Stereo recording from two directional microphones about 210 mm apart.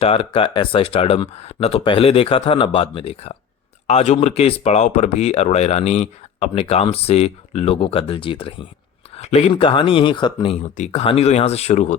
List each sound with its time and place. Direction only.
0.0 s speech: 25° left (ahead or behind)